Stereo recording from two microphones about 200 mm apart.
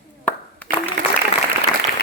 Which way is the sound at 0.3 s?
10° left (ahead or behind).